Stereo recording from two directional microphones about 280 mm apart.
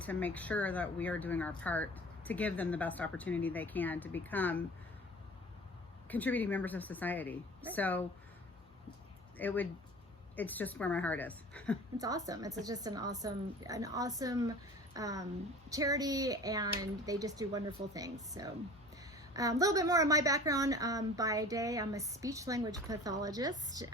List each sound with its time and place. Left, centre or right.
0.0 s speech: centre
6.1 s speech: centre
9.4 s speech: centre
11.9 s a woman's voice: centre